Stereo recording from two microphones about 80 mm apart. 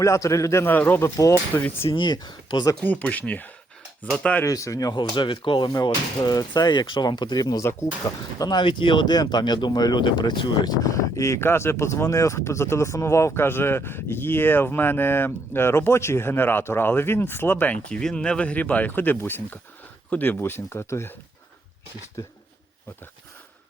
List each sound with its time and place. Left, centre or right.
0.0 s speech: left
0.6 s speech: left
1.1 s speech: left
1.8 s speech: left
2.8 s speech: centre
4.4 s speech: left
5.1 s speech: left
5.7 s speech: left
7.6 s speech: left
8.4 s speech: left
17.8 s speech: centre; by 21.1 s left